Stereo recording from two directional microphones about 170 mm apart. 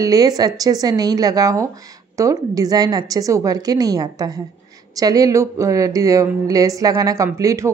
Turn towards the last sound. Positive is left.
turn(degrees=-20)  # may be behind; listen again after turning